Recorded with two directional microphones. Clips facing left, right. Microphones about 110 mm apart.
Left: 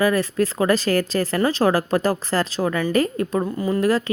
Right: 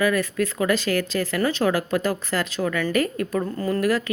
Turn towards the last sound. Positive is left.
turn(degrees=10)  # may be behind; listen again after turning